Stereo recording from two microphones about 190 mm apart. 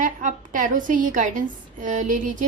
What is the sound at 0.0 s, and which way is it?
A woman's voice, 45° right (ahead or behind).